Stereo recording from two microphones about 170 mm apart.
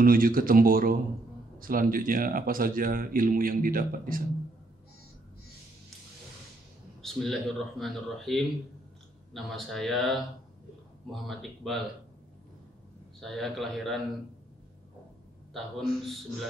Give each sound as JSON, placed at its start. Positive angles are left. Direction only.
{"t": 0.0, "sound": "speech", "side_deg": -55}
{"t": 7.0, "sound": "speech", "side_deg": 0}
{"t": 13.2, "sound": "speech", "side_deg": 0}
{"t": 15.5, "sound": "speech", "side_deg": 0}